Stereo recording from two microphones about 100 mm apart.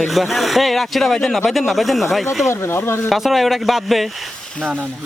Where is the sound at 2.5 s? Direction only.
25° left (ahead or behind).